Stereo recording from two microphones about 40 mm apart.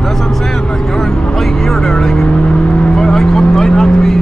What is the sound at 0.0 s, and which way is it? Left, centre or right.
Vehicle, centre.